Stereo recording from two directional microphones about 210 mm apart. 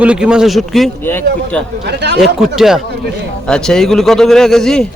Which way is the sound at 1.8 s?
50° right (ahead or behind).